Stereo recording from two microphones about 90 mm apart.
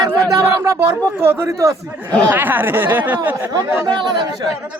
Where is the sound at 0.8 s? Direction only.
25° right (ahead or behind).